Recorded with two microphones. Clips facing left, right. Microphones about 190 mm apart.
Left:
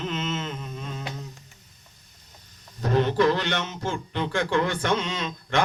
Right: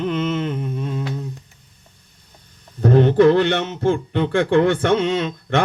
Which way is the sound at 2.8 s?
55° right (ahead or behind).